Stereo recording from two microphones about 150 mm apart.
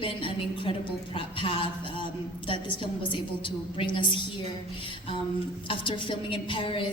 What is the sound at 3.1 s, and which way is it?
A woman's voice, 35° left (ahead or behind).